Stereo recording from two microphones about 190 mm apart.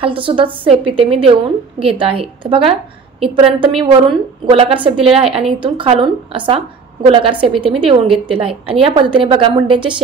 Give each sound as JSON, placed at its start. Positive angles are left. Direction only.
{"t": 0.0, "sound": "a woman's voice", "side_deg": -25}